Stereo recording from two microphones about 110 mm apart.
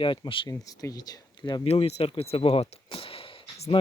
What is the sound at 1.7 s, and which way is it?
Speech, 70° left (ahead or behind).